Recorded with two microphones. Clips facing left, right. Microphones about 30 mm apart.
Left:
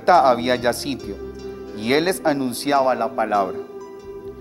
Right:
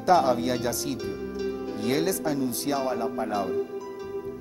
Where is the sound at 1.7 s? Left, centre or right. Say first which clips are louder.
Left 8 dB; left.